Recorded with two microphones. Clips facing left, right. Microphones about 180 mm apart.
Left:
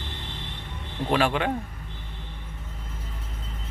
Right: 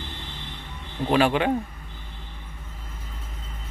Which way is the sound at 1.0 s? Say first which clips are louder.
Right 3 dB; 5° right (ahead or behind).